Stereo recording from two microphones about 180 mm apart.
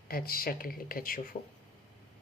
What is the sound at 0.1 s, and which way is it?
Speech, 55° left (ahead or behind).